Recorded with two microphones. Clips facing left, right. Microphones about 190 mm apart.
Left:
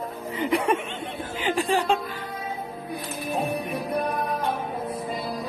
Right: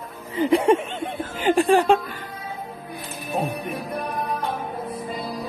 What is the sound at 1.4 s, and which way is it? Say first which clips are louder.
Speech: right 7 dB; 50° right (ahead or behind).